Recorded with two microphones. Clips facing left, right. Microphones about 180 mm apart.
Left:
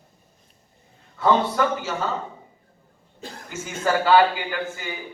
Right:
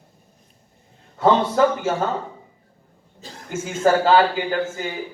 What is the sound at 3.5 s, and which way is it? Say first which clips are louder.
A man's voice: right 6 dB; 40° right (ahead or behind).